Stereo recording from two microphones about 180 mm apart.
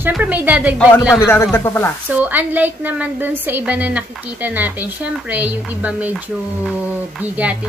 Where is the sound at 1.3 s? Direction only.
15° left (ahead or behind).